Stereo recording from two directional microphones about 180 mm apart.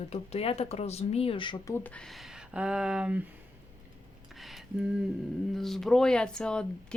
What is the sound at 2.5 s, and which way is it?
Speech, 5° right (ahead or behind).